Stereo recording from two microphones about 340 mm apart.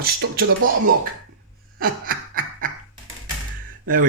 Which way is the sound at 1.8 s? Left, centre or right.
Right.